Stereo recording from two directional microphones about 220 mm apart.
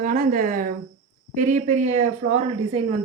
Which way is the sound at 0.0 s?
40° right (ahead or behind).